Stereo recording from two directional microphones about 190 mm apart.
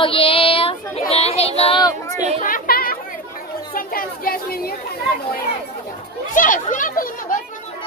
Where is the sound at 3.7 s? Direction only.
50° left (ahead or behind).